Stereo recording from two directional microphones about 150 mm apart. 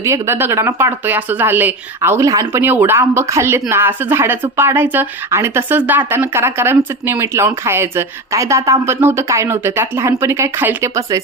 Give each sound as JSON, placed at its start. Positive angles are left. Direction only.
{"t": 0.0, "sound": "a woman's voice", "side_deg": -20}